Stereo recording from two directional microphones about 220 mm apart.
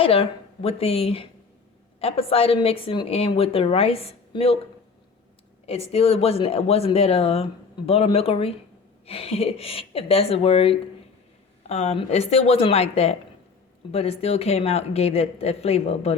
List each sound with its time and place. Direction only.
0.0 s a woman's voice: 25° left (ahead or behind)
5.6 s a woman's voice: 25° left (ahead or behind)